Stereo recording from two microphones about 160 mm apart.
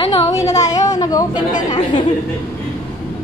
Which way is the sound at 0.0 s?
35° left (ahead or behind).